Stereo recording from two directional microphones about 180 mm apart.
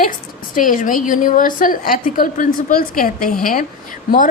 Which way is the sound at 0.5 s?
50° left (ahead or behind).